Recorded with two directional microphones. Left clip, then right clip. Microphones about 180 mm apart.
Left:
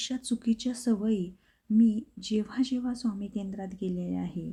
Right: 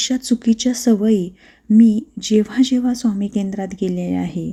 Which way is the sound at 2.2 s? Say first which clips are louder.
Right 14 dB; 20° right (ahead or behind).